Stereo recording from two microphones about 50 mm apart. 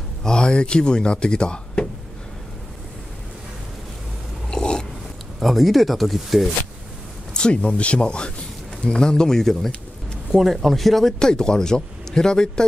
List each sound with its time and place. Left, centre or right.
0.2 s speech: centre
4.5 s a sound: centre
5.4 s speech: centre
7.3 s speech: centre